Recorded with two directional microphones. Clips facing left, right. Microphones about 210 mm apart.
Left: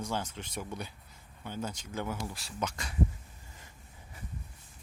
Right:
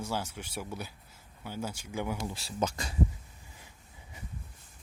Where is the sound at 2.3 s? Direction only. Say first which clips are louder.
Right 4 dB; 30° right (ahead or behind).